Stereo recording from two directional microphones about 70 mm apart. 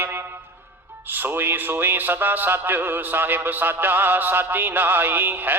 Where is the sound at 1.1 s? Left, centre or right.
Right.